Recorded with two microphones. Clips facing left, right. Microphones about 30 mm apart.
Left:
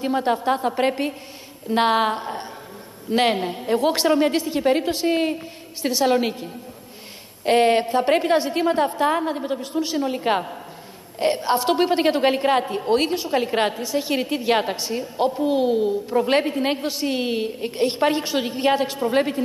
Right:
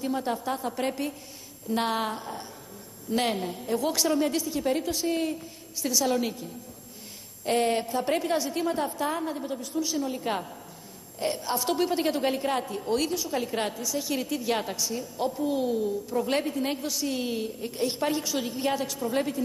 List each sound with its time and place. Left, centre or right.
0.0 s a woman's voice: left